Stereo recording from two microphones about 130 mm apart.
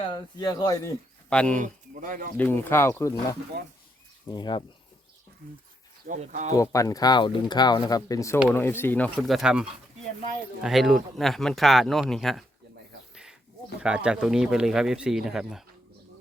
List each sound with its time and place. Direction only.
0.0 s speech: 35° left (ahead or behind)
1.3 s speech: 10° left (ahead or behind)
1.5 s speech: 80° right
2.4 s speech: 15° left (ahead or behind)
4.3 s speech: 35° left (ahead or behind)
6.1 s speech: 70° right (ahead or behind)
6.5 s speech: 25° left (ahead or behind)
9.2 s speech: centre (ahead or behind)
13.8 s speech: 5° right (ahead or behind)